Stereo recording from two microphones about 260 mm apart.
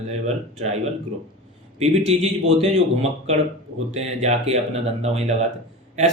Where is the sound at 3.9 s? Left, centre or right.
Right.